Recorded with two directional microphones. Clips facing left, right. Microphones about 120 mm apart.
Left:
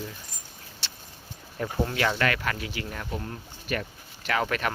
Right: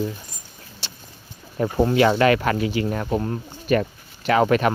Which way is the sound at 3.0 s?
45° right (ahead or behind).